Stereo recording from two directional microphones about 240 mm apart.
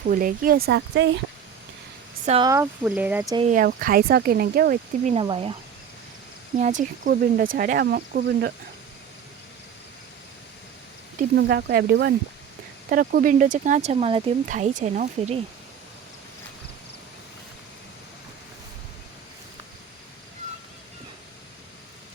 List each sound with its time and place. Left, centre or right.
0.1 s speech: right
2.2 s speech: right
2.5 s speech: centre
3.3 s speech: right
6.6 s speech: right
11.2 s speech: right